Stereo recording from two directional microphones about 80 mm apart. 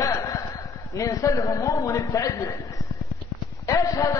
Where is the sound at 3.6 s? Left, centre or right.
Left.